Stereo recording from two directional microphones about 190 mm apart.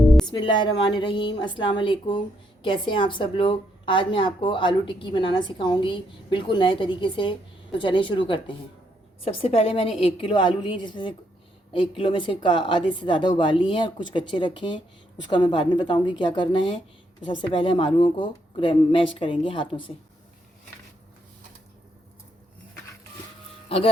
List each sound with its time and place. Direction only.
0.0 s music: centre (ahead or behind)
0.3 s a woman's voice: 25° left (ahead or behind)
23.6 s speech: 30° left (ahead or behind)